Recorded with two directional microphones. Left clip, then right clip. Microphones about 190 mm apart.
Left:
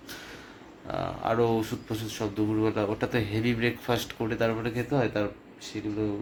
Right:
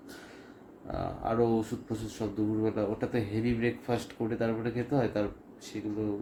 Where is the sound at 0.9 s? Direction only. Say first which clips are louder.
Left 4 dB; centre (ahead or behind).